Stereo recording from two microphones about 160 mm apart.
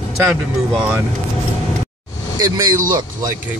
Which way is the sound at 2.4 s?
20° right (ahead or behind).